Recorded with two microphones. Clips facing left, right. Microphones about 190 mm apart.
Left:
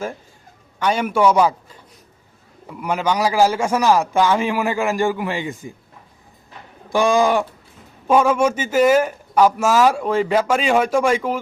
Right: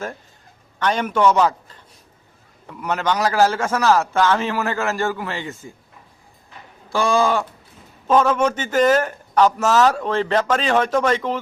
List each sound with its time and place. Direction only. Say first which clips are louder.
0.8 s a man's voice: left 1 dB; 10° left (ahead or behind)
6.9 s speech: left 2 dB; 15° left (ahead or behind)